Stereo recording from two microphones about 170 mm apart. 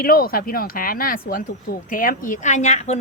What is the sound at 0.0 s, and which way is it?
A woman's voice, 60° left (ahead or behind).